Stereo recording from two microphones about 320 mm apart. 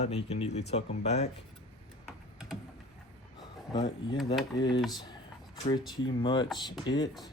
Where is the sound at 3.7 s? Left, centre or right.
Centre.